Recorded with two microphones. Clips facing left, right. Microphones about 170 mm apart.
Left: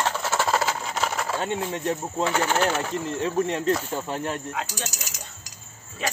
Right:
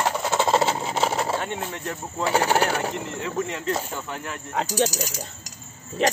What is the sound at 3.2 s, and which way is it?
Speech, 35° left (ahead or behind).